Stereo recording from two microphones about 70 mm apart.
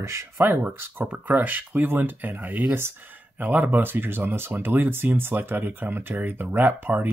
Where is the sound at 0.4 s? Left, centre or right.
Right.